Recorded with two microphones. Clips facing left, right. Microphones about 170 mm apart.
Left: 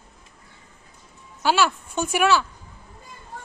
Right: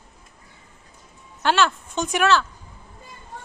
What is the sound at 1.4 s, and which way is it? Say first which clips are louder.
A woman's voice: even; 10° left (ahead or behind).